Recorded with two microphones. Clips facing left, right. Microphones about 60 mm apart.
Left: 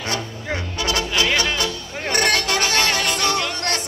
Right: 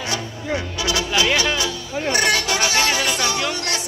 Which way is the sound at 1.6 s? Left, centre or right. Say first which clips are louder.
Right 1 dB; left.